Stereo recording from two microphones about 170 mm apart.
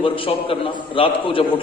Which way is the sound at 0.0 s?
30° left (ahead or behind).